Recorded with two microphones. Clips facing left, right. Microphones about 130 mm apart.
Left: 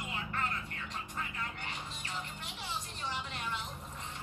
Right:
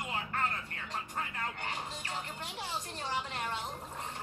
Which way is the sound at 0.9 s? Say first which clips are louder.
Right 4 dB; 45° right (ahead or behind).